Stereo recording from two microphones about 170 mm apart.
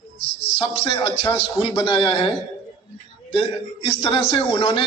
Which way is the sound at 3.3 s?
30° left (ahead or behind).